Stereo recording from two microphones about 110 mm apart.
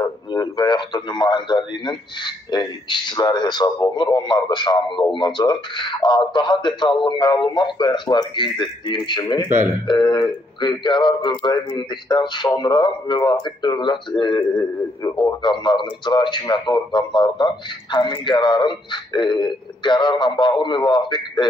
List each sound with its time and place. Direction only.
0.3 s speech: 40° left (ahead or behind)